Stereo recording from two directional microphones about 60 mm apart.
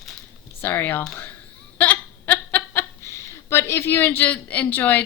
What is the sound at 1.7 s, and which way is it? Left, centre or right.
Hiccup, left.